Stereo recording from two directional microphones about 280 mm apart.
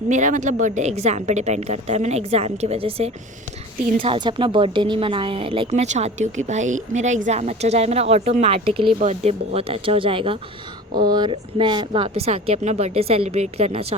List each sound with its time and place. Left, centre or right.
0.1 s a woman's voice: right